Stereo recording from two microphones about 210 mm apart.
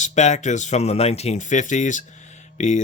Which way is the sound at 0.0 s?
35° left (ahead or behind).